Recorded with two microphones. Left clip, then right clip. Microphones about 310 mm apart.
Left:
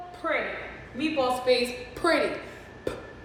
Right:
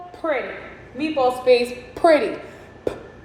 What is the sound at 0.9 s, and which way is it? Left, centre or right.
A woman's voice, centre.